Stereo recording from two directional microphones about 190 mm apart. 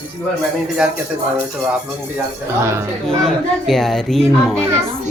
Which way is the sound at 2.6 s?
15° right (ahead or behind).